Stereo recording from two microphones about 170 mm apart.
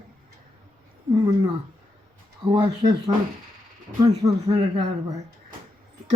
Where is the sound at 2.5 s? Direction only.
30° right (ahead or behind).